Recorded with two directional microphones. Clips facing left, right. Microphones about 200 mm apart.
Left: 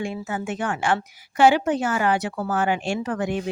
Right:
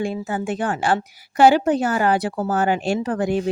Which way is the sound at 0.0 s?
35° right (ahead or behind).